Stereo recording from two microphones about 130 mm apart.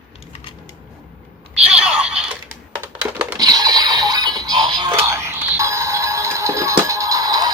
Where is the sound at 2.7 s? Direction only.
15° right (ahead or behind).